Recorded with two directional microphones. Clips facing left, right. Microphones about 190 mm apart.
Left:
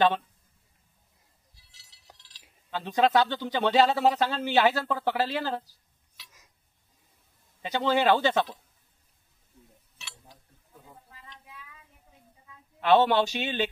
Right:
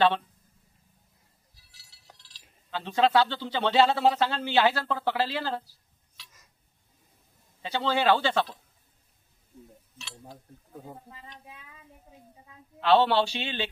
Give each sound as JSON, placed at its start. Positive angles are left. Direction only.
{"t": 1.7, "sound": "chink", "side_deg": 20}
{"t": 2.7, "sound": "speech", "side_deg": 15}
{"t": 6.1, "sound": "dishes", "side_deg": 10}
{"t": 7.6, "sound": "speech", "side_deg": 15}
{"t": 10.2, "sound": "a sound", "side_deg": -50}
{"t": 12.8, "sound": "speech", "side_deg": 15}